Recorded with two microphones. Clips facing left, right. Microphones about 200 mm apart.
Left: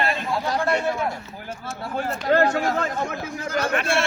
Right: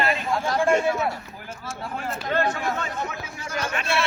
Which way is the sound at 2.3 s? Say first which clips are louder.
Left 5 dB; 70° left (ahead or behind).